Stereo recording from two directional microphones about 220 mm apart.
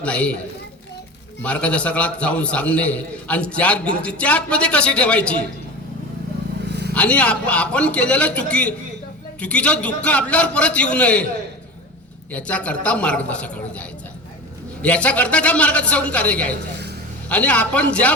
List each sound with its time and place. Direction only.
0.0 s a man's voice: 5° left (ahead or behind)
1.4 s a man's voice: 5° left (ahead or behind)
6.7 s vehicle: 50° right (ahead or behind)
6.9 s a man's voice: 5° left (ahead or behind)
12.3 s a man's voice: 5° left (ahead or behind)
16.7 s a sound: 50° right (ahead or behind)
17.2 s a man's voice: 5° left (ahead or behind)